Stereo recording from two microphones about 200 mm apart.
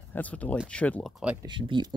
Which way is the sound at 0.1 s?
5° left (ahead or behind).